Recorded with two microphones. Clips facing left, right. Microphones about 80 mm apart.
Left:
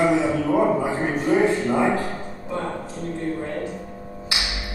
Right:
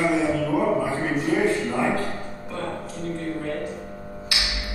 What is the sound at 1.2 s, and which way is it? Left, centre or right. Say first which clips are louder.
A man's voice: left 3 dB; left.